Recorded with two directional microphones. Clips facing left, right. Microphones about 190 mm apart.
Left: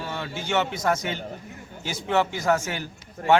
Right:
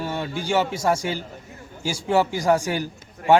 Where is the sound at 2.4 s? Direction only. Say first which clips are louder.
Right 3 dB; 15° right (ahead or behind).